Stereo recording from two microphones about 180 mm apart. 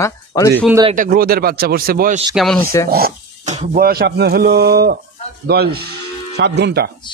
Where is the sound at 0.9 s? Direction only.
50° right (ahead or behind).